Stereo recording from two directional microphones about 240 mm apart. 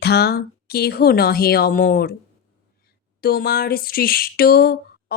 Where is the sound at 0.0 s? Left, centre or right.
Left.